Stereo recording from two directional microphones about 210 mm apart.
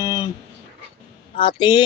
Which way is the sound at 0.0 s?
20° left (ahead or behind).